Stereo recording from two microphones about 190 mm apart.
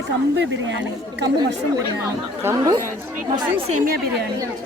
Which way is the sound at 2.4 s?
20° right (ahead or behind).